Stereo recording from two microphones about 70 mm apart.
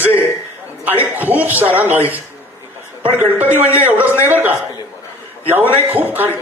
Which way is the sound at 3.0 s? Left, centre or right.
Right.